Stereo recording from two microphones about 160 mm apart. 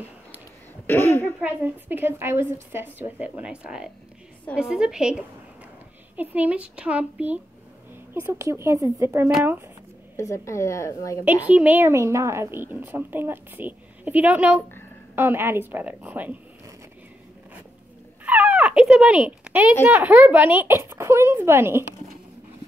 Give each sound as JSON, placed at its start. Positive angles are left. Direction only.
{"t": 0.8, "sound": "speech", "side_deg": 15}
{"t": 1.4, "sound": "a woman's voice", "side_deg": -10}
{"t": 10.1, "sound": "a woman's voice", "side_deg": 20}
{"t": 11.4, "sound": "a woman's voice", "side_deg": -10}
{"t": 18.2, "sound": "speech", "side_deg": -10}